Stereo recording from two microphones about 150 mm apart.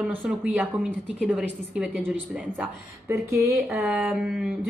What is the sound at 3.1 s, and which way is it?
Speech, 20° right (ahead or behind).